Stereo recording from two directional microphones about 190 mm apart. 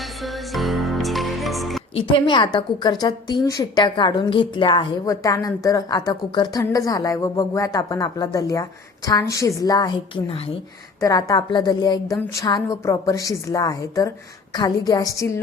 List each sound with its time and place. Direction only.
0.2 s music: centre (ahead or behind)
2.0 s a woman's voice: 25° left (ahead or behind)